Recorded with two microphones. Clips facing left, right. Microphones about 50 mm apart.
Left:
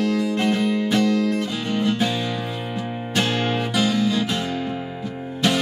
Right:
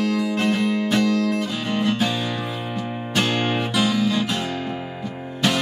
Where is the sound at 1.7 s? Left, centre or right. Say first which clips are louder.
Even; centre.